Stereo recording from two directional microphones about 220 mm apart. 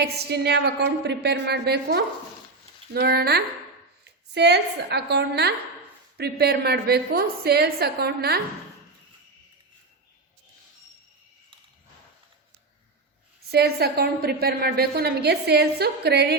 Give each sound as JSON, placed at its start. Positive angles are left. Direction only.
{"t": 0.0, "sound": "a woman's voice", "side_deg": -50}
{"t": 13.5, "sound": "a woman's voice", "side_deg": -45}